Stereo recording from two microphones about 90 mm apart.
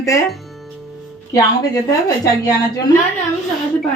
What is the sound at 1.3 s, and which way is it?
Speech, 40° left (ahead or behind).